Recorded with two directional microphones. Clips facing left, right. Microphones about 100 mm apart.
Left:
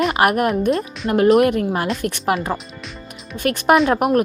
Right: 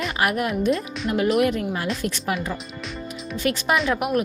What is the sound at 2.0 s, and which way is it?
Speech, 55° left (ahead or behind).